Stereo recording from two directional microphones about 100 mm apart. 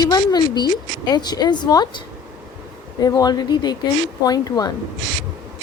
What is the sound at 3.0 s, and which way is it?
A woman's voice, 45° left (ahead or behind).